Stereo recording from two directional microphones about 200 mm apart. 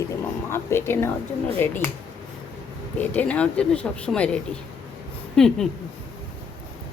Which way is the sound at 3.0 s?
10° left (ahead or behind).